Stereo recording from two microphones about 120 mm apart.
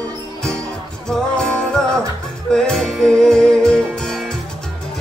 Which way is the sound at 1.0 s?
5° left (ahead or behind).